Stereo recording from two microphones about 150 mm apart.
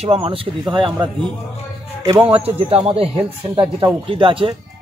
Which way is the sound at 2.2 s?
40° right (ahead or behind).